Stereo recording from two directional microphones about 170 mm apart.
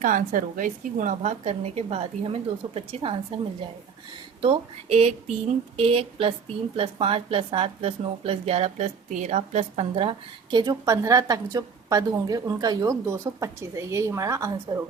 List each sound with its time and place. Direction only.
0.0 s a woman's voice: 50° right (ahead or behind); by 14.5 s 20° right (ahead or behind)